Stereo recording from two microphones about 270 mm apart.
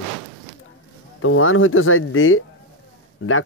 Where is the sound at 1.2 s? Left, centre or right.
Left.